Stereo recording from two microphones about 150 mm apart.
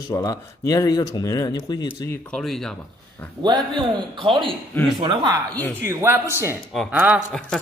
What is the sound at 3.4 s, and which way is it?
A man's voice, 30° right (ahead or behind).